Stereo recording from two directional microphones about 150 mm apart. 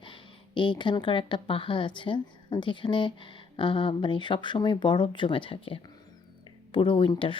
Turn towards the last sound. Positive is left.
turn(degrees=35)  # may be behind; listen again after turning